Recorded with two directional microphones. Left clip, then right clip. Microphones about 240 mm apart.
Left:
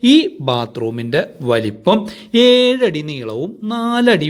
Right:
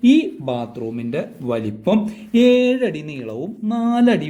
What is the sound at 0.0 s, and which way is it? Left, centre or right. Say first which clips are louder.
Speech: left 4 dB; centre.